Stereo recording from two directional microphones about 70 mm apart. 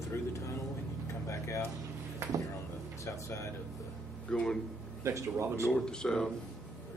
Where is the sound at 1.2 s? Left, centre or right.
Left.